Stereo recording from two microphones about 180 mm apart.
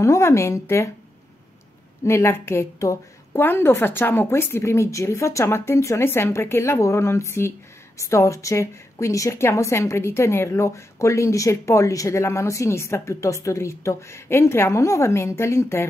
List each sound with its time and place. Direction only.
0.0 s a woman's voice: 15° left (ahead or behind)
2.0 s a woman's voice: 15° left (ahead or behind)